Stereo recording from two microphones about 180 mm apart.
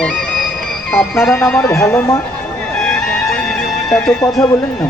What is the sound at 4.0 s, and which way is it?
Speech, 5° left (ahead or behind).